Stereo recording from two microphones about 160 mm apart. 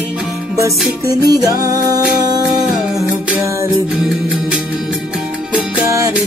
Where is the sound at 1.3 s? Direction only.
25° right (ahead or behind).